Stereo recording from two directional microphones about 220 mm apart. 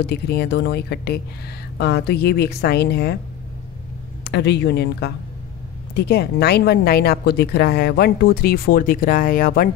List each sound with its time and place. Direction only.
0.0 s speech: 50° left (ahead or behind)
4.2 s speech: 50° left (ahead or behind)